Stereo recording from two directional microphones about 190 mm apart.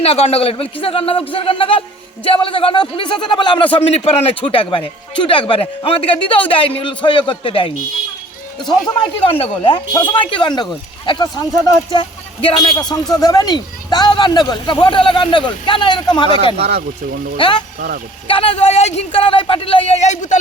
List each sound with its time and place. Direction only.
0.0 s speech: 30° left (ahead or behind)
9.0 s speech: 30° left (ahead or behind)
16.6 s speech: 60° right (ahead or behind)
17.3 s speech: 25° left (ahead or behind)
17.7 s speech: 50° right (ahead or behind)
18.3 s a man's voice: 30° left (ahead or behind)